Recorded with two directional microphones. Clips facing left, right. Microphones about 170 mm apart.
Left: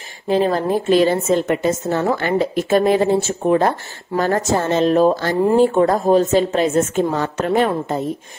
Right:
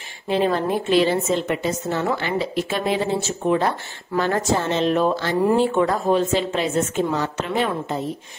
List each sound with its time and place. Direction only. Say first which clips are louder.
0.3 s speech: left 3 dB; 40° left (ahead or behind)